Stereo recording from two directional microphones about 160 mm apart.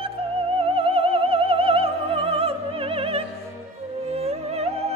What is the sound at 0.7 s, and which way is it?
Opera, 35° right (ahead or behind).